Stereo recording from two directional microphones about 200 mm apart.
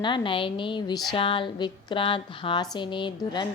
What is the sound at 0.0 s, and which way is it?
A woman's voice, 25° left (ahead or behind).